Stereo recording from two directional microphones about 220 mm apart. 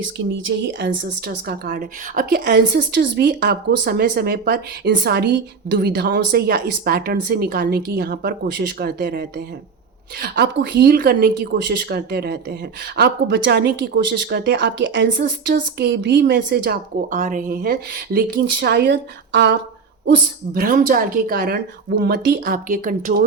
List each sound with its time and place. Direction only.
0.0 s speech: 60° right (ahead or behind)
17.1 s speech: 35° right (ahead or behind)